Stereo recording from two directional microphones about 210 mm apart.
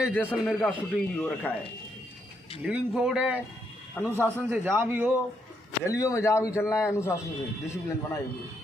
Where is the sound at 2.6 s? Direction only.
5° right (ahead or behind).